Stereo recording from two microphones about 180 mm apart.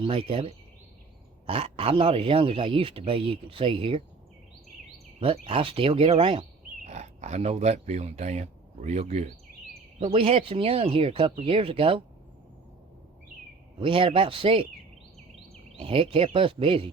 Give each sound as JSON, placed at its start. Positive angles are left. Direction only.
{"t": 0.0, "sound": "speech", "side_deg": -30}
{"t": 5.2, "sound": "speech", "side_deg": -30}
{"t": 13.7, "sound": "speech", "side_deg": -30}
{"t": 15.8, "sound": "speech", "side_deg": -30}